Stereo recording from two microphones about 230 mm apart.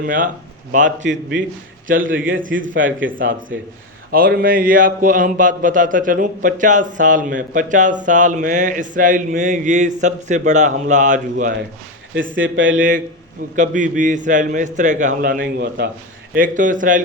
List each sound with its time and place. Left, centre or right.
0.0 s speech: right
1.9 s speech: right
4.1 s speech: right
12.1 s speech: right
13.6 s speech: right